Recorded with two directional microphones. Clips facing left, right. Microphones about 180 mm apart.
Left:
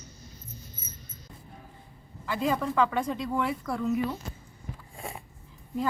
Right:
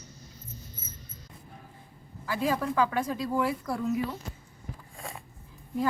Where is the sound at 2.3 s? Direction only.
5° right (ahead or behind).